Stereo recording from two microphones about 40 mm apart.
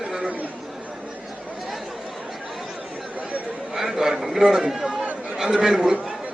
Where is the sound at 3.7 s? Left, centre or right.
Centre.